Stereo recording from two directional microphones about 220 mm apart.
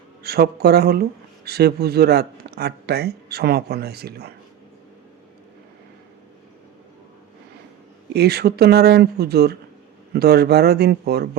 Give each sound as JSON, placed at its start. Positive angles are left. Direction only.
{"t": 0.2, "sound": "speech", "side_deg": -45}
{"t": 8.1, "sound": "speech", "side_deg": -45}